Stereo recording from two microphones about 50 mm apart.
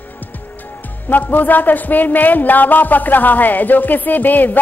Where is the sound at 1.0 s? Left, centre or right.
Left.